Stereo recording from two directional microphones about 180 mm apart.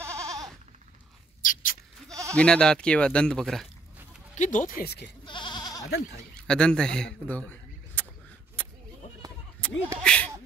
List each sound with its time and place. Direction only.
0.0 s goat: 15° right (ahead or behind)
1.4 s a sound: 50° left (ahead or behind)
2.3 s speech: 5° left (ahead or behind)
4.4 s speech: 45° left (ahead or behind); by 5.1 s 65° left (ahead or behind)
5.2 s goat: 25° left (ahead or behind)
6.4 s speech: 5° left (ahead or behind)
8.6 s bleat: 10° left (ahead or behind)
9.6 s a sound: 5° left (ahead or behind)